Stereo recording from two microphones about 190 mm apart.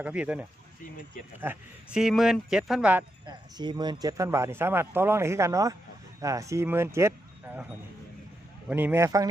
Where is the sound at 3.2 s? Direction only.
20° right (ahead or behind).